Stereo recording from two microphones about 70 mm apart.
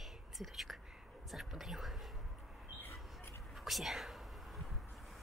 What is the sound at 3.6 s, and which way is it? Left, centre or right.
Speech, centre.